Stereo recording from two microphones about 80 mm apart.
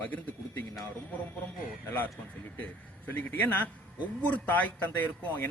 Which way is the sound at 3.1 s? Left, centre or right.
Left.